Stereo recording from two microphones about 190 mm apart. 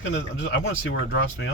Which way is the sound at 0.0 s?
75° left (ahead or behind).